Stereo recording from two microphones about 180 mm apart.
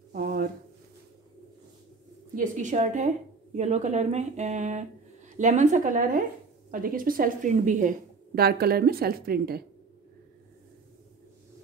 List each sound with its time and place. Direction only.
0.1 s a sound: 55° right (ahead or behind)
2.3 s a woman's voice: 45° right (ahead or behind)
8.4 s a woman's voice: 60° right (ahead or behind)